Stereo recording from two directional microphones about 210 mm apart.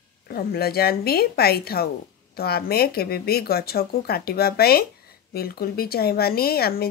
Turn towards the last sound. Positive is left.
turn(degrees=45)  # may be behind; listen again after turning